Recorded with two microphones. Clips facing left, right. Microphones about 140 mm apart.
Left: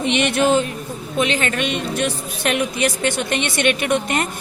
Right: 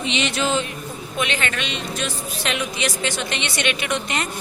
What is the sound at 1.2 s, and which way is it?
Speech, 40° left (ahead or behind).